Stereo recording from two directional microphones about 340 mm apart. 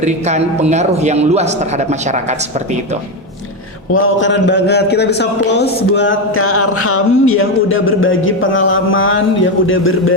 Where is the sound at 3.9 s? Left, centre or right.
Left.